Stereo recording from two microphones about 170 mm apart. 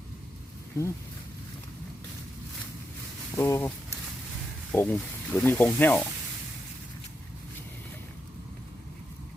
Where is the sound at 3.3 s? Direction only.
15° left (ahead or behind).